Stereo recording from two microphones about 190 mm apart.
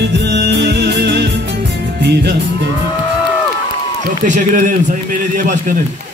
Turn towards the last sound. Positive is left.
turn(degrees=-40)  # may be behind; listen again after turning